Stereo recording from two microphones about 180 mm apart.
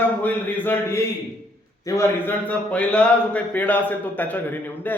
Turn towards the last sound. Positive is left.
turn(degrees=10)  # may be behind; listen again after turning